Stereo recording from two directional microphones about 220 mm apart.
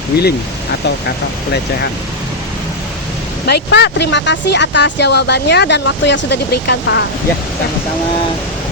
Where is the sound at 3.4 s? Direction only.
50° left (ahead or behind).